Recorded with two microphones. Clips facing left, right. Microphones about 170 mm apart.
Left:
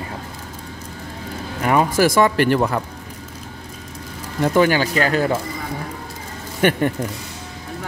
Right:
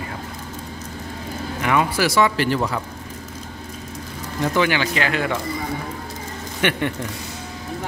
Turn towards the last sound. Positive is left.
turn(degrees=40)  # may be behind; listen again after turning